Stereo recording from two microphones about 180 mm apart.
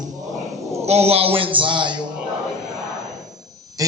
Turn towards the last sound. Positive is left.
turn(degrees=-20)  # may be behind; listen again after turning